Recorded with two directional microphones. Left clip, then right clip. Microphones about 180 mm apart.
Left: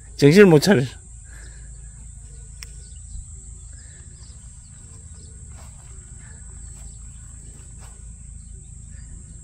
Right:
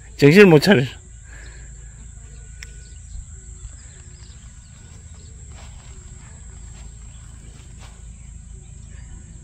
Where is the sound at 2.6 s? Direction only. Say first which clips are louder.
Right 2 dB; 60° left (ahead or behind).